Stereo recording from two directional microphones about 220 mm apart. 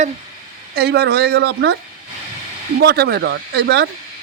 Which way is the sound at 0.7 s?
50° right (ahead or behind).